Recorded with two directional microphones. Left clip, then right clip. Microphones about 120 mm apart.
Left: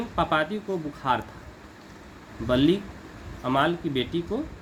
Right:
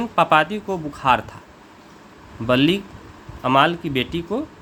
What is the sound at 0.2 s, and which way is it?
Speech, 90° right.